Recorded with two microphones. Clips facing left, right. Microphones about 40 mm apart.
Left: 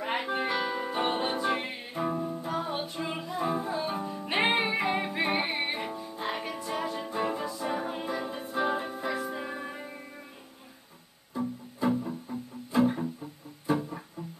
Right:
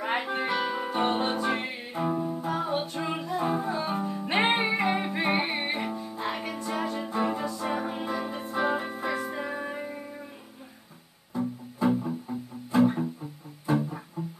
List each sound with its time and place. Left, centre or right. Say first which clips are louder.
0.0 s music: right 1 dB; centre
11.3 s music: right 3 dB; centre